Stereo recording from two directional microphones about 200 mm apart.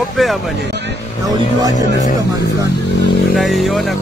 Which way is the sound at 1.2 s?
20° right (ahead or behind).